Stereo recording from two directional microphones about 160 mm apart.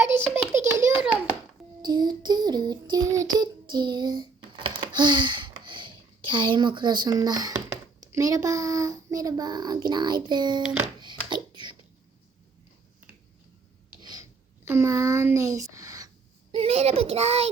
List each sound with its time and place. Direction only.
0.0 s a sound: 15° right (ahead or behind)
1.8 s child singing: 25° right (ahead or behind)
8.0 s a child's voice: 20° right (ahead or behind)
11.0 s hands: 30° right (ahead or behind)
11.5 s cough: 30° right (ahead or behind)
14.0 s a sound: 25° right (ahead or behind)
16.5 s a child's voice: 35° right (ahead or behind)